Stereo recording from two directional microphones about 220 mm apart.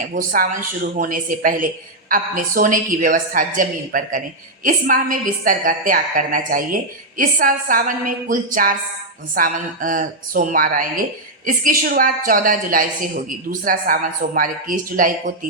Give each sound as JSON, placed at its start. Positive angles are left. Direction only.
{"t": 0.1, "sound": "a woman's voice", "side_deg": -40}